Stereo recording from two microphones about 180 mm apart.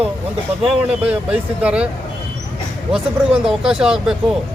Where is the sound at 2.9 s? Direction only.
5° right (ahead or behind).